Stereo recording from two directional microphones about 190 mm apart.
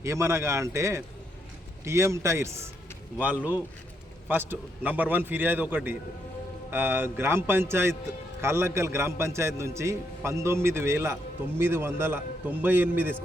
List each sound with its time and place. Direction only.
0.0 s a man's voice: 15° right (ahead or behind)